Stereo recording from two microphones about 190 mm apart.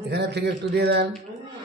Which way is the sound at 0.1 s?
60° right (ahead or behind).